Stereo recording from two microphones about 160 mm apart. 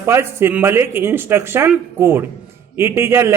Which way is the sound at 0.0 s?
15° right (ahead or behind).